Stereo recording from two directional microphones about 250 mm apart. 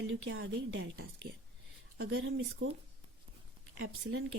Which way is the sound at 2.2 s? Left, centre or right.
Right.